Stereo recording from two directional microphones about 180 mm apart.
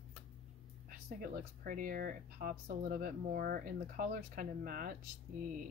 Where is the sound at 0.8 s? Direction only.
55° right (ahead or behind).